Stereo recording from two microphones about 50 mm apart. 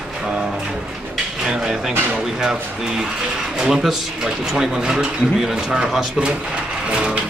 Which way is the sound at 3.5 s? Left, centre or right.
Centre.